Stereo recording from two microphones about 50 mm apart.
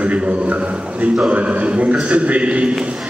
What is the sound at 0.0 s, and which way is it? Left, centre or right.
Speech, right.